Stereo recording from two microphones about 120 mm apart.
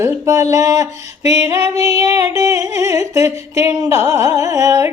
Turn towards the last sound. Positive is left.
turn(degrees=-30)  # may be behind; listen again after turning